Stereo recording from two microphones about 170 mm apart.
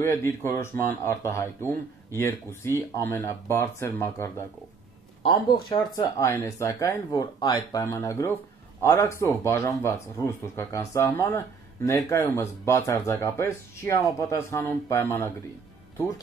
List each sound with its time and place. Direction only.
0.0 s speech: 15° left (ahead or behind)
5.2 s speech: 25° left (ahead or behind)